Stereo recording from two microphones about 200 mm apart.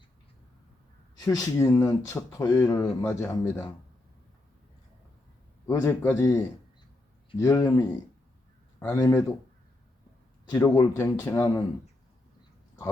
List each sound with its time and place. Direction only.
1.2 s speech: 15° left (ahead or behind)
5.6 s speech: 15° left (ahead or behind)
10.5 s speech: 15° left (ahead or behind)